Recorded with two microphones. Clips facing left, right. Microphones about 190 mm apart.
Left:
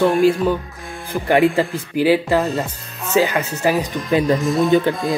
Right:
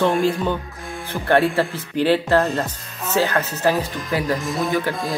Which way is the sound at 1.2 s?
15° left (ahead or behind).